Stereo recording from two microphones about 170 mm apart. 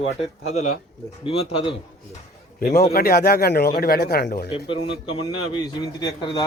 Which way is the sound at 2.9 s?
65° left (ahead or behind).